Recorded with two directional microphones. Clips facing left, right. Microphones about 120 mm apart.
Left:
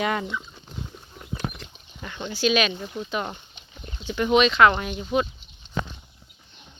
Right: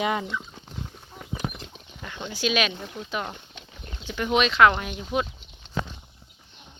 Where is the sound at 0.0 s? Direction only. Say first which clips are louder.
Even; 10° right (ahead or behind).